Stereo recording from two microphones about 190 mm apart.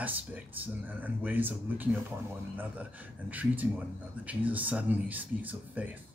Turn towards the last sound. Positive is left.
turn(degrees=-10)  # may be behind; listen again after turning